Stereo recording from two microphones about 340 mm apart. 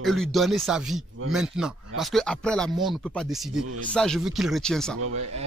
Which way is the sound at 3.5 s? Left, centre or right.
Right.